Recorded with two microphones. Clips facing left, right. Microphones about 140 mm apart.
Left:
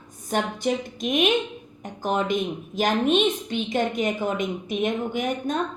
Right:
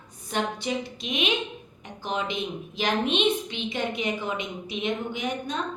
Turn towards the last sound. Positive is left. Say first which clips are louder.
# left 5 dB
turn(degrees=50)  # may be behind; listen again after turning